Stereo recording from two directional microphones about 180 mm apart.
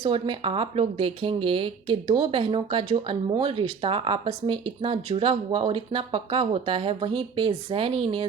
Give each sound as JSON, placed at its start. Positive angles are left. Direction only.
{"t": 0.0, "sound": "speech", "side_deg": -30}